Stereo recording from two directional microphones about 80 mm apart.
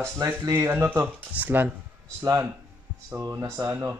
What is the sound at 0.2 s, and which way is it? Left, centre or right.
Speech, right.